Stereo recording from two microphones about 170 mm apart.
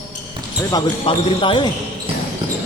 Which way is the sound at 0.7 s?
30° left (ahead or behind).